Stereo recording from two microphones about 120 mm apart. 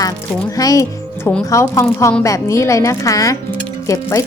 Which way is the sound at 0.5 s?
30° left (ahead or behind).